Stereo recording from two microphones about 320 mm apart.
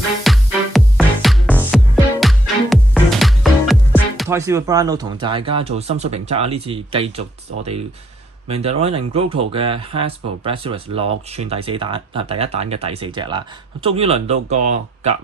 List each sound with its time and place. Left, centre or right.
0.3 s music: centre
5.2 s speech: centre